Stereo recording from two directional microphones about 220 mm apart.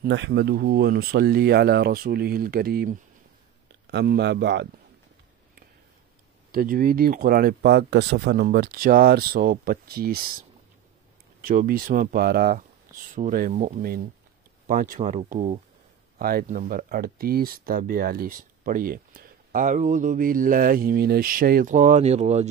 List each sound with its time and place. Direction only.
0.0 s speech: 50° right (ahead or behind)
6.5 s speech: 40° right (ahead or behind)
11.4 s speech: 40° right (ahead or behind)
16.2 s speech: 40° right (ahead or behind)